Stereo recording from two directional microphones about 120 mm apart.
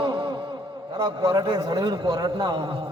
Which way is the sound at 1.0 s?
30° right (ahead or behind).